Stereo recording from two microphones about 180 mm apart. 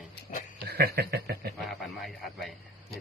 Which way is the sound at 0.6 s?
60° right (ahead or behind).